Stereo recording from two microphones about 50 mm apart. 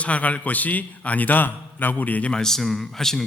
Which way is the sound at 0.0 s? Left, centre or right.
Left.